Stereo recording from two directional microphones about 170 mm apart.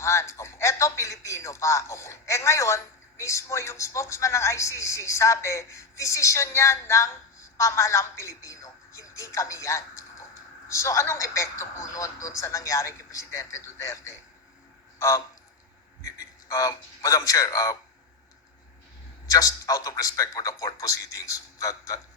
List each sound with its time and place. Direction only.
0.0 s a man's voice: 15° left (ahead or behind)
14.9 s a sound: 15° left (ahead or behind)
16.0 s a man's voice: 20° left (ahead or behind)
19.3 s a man's voice: 20° left (ahead or behind)